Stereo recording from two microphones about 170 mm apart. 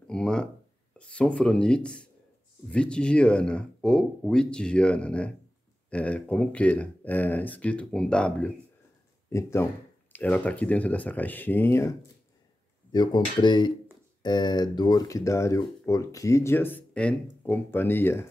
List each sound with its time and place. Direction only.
0.0 s speech: 5° left (ahead or behind)
9.3 s speech: 15° left (ahead or behind)
12.9 s speech: 25° left (ahead or behind)